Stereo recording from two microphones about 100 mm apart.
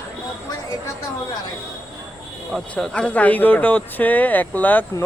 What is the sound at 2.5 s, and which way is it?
Speech, 5° left (ahead or behind).